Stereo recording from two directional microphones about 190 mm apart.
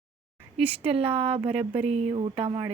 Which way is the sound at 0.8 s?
30° right (ahead or behind).